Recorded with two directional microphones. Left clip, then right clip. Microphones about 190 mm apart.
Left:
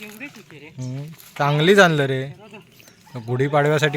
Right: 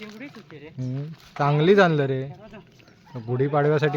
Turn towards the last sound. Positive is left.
turn(degrees=5)  # may be behind; listen again after turning